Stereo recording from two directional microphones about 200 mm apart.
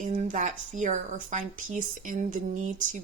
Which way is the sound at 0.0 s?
35° right (ahead or behind).